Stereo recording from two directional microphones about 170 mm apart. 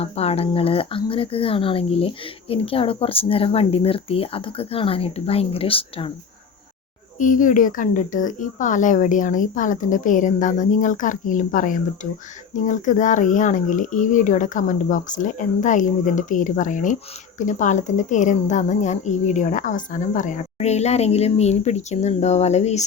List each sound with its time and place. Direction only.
0.0 s speech: 35° left (ahead or behind)
7.2 s speech: 50° left (ahead or behind)